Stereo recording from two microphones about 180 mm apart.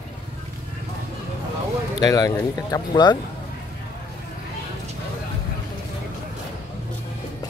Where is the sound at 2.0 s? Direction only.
20° left (ahead or behind).